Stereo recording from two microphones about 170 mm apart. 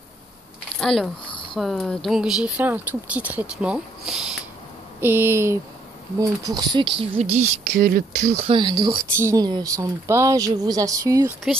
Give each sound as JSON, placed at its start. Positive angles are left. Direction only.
{"t": 0.7, "sound": "speech", "side_deg": 0}
{"t": 7.3, "sound": "speech", "side_deg": -45}
{"t": 7.8, "sound": "speech", "side_deg": -55}
{"t": 8.4, "sound": "speech", "side_deg": -30}